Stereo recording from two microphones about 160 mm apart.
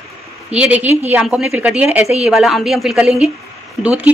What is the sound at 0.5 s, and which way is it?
Speech, 10° right (ahead or behind).